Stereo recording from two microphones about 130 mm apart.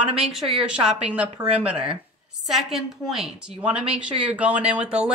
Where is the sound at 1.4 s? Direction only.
30° right (ahead or behind).